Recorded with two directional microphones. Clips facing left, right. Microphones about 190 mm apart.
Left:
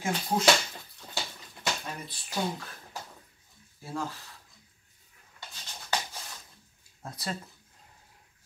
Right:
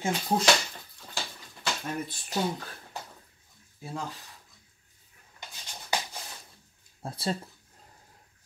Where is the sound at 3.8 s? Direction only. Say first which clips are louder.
Left 1 dB; 20° right (ahead or behind).